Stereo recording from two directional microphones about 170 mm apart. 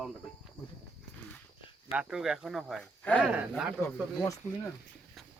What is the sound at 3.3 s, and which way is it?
Speech, 5° right (ahead or behind).